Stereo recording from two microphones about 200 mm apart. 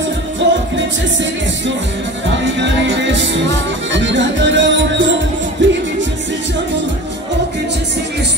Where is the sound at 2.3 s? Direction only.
65° right (ahead or behind).